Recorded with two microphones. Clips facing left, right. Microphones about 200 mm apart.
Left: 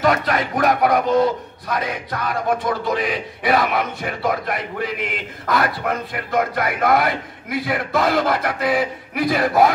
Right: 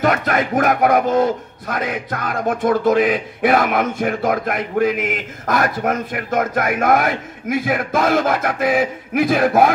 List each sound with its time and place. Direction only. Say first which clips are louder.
0.0 s a man's voice: right 1 dB; 50° right (ahead or behind)